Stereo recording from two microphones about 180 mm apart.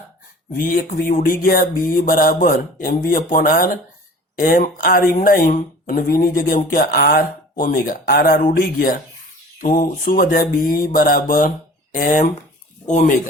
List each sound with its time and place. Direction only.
0.5 s speech: 50° left (ahead or behind)